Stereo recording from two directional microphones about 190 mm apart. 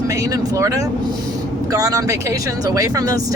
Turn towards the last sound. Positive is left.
turn(degrees=-20)  # may be behind; listen again after turning